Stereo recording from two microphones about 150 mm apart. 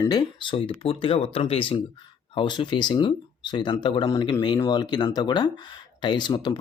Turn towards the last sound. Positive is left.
turn(degrees=30)  # may be behind; listen again after turning